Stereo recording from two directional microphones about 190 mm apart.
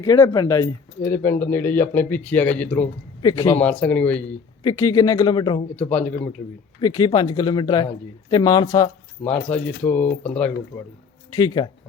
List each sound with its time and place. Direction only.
0.0 s speech: 20° left (ahead or behind)
3.2 s speech: 20° left (ahead or behind)
4.6 s a man's voice: 20° left (ahead or behind)
5.7 s speech: 10° left (ahead or behind)
6.8 s a man's voice: 20° left (ahead or behind)
11.3 s a man's voice: 20° left (ahead or behind)